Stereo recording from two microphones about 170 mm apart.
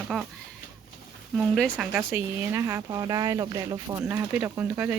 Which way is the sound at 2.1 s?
15° right (ahead or behind).